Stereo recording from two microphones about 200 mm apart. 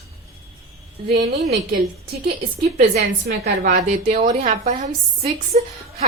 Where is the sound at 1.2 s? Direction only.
35° right (ahead or behind).